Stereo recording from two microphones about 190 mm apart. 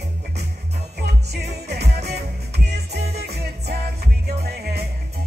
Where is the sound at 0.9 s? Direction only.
60° right (ahead or behind).